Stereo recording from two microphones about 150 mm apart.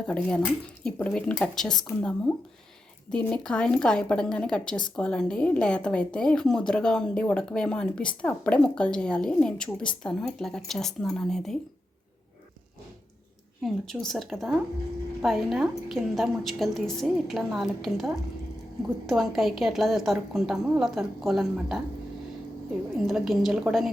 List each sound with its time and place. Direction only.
0.1 s speech: 10° left (ahead or behind)
13.6 s speech: centre (ahead or behind)
23.0 s speech: centre (ahead or behind)